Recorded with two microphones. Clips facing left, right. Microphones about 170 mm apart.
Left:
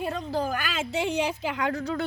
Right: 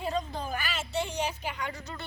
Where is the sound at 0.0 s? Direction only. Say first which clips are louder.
Left 4 dB; 60° left (ahead or behind).